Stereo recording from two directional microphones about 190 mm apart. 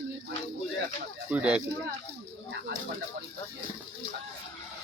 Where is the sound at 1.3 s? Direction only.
5° right (ahead or behind).